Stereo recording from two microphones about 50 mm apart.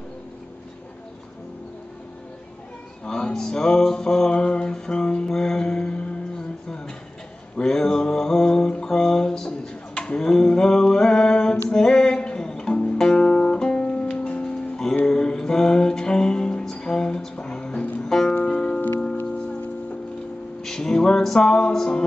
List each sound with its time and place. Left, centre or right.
3.1 s music: centre
7.5 s mantra: centre
11.7 s music: centre
20.6 s music: centre